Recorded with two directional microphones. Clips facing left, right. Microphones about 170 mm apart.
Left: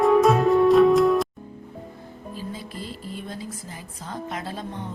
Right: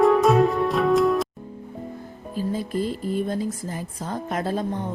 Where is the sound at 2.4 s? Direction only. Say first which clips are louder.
Right 11 dB; 45° right (ahead or behind).